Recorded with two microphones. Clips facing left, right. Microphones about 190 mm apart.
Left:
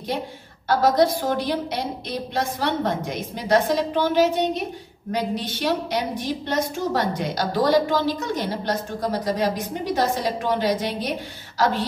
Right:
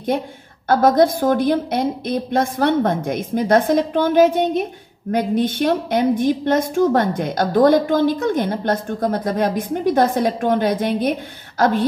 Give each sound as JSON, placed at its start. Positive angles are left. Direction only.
{"t": 0.7, "sound": "a woman's voice", "side_deg": -50}